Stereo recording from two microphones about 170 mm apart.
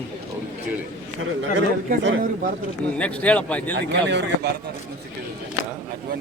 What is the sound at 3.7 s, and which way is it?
Speech, 80° right.